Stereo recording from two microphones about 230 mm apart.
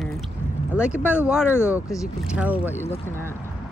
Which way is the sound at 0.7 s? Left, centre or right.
Centre.